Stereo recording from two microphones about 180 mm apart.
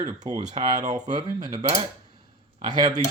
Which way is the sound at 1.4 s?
20° right (ahead or behind).